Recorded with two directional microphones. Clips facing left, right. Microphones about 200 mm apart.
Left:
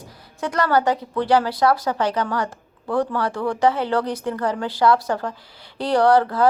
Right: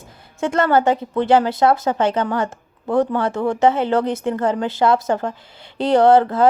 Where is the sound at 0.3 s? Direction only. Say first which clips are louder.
Right 3 dB; 25° right (ahead or behind).